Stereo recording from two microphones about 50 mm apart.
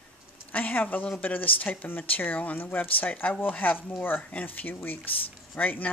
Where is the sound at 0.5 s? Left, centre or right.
Left.